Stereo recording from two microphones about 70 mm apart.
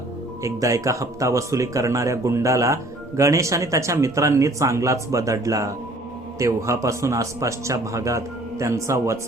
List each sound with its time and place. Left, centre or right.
0.4 s speech: right